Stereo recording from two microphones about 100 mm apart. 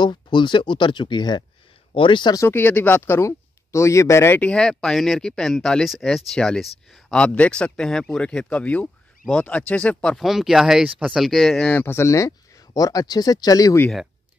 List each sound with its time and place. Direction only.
0.0 s speech: 50° left (ahead or behind)
2.3 s speech: 25° left (ahead or behind)
4.4 s speech: 10° left (ahead or behind)
10.1 s speech: 5° right (ahead or behind)
11.7 s speech: 20° left (ahead or behind); by 13.7 s 40° left (ahead or behind)